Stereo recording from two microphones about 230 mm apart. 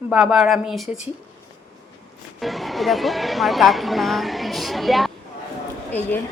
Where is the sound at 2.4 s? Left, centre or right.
Centre.